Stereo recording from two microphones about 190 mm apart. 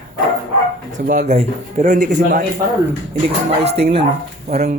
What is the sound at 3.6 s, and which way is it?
Speech, 35° right (ahead or behind).